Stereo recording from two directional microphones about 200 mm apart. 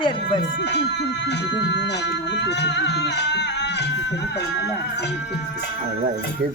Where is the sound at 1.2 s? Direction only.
60° left (ahead or behind).